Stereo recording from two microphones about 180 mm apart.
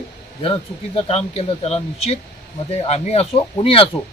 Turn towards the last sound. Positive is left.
turn(degrees=30)  # may be behind; listen again after turning